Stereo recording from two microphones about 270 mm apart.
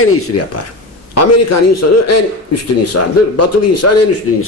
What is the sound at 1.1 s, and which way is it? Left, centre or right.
A man's voice, left.